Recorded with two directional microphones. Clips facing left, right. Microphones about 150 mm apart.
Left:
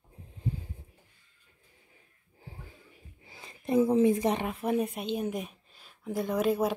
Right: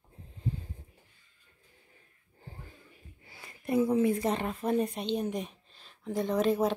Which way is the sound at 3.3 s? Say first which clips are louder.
Left 2 dB; 20° left (ahead or behind).